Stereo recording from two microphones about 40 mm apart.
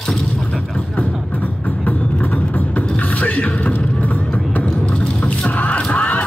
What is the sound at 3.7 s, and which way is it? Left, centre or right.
Vehicle, left.